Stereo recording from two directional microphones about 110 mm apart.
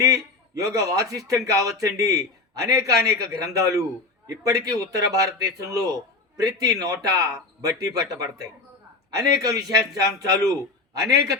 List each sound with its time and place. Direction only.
0.0 s a man's voice: 30° right (ahead or behind)